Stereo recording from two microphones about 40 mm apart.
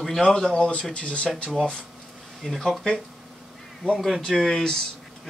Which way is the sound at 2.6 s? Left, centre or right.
Centre.